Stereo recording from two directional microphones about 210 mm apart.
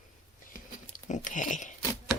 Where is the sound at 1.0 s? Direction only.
35° left (ahead or behind).